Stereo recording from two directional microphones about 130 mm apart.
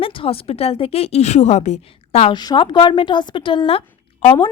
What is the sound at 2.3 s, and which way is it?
A woman's voice, 35° left (ahead or behind).